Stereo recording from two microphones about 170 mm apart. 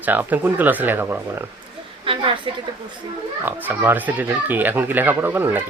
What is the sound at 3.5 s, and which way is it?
Speech, 10° right (ahead or behind).